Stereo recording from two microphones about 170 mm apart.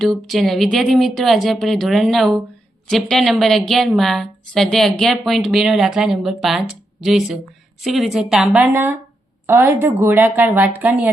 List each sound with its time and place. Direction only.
0.0 s speech: centre (ahead or behind)